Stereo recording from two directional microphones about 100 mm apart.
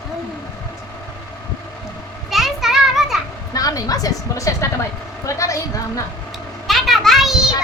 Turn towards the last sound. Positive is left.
turn(degrees=-5)  # may be behind; listen again after turning